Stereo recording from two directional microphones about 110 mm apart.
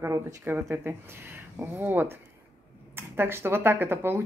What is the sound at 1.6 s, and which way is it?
A woman's voice, 20° right (ahead or behind).